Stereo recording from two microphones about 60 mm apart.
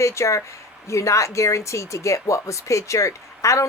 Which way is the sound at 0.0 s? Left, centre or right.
Left.